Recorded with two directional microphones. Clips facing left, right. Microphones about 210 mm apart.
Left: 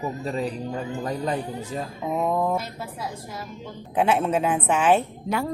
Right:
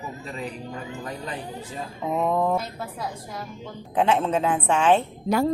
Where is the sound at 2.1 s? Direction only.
5° left (ahead or behind).